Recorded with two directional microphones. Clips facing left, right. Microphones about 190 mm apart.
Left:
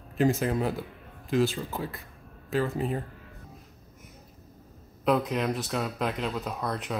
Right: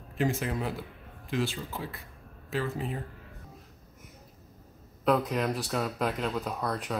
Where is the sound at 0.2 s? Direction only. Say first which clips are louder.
Left 5 dB; 40° left (ahead or behind).